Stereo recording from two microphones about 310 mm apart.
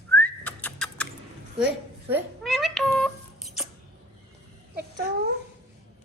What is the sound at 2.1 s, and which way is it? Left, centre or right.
Telephone dialing, centre.